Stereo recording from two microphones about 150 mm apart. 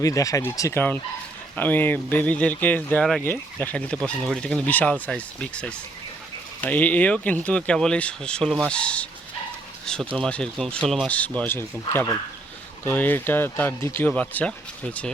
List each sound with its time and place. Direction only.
0.0 s speech: 20° left (ahead or behind)